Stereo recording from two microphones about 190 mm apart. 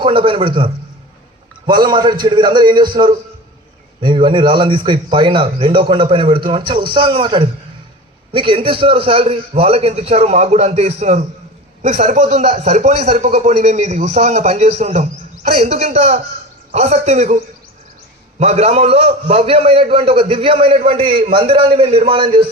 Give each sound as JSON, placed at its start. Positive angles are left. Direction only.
{"t": 0.0, "sound": "a man's voice", "side_deg": -30}